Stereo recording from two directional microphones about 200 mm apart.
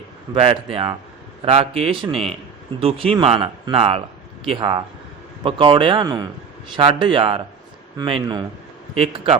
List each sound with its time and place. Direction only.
0.3 s speech: 30° right (ahead or behind)